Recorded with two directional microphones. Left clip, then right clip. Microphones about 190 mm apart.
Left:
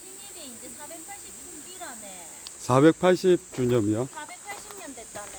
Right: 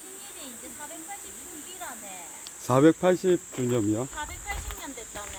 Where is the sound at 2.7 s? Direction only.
15° left (ahead or behind).